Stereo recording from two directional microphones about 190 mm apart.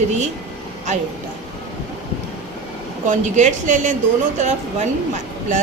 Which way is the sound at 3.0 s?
40° right (ahead or behind).